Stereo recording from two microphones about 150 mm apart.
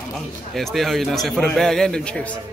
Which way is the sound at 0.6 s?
Centre (ahead or behind).